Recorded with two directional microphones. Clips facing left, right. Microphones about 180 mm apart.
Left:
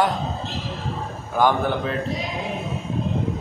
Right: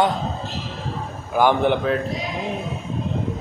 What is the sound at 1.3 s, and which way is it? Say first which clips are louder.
Speech: right 3 dB; 15° right (ahead or behind).